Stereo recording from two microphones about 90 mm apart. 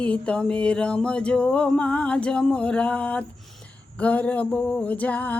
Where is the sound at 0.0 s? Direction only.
15° left (ahead or behind).